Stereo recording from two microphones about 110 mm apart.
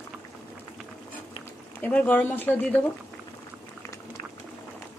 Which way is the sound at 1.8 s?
15° left (ahead or behind).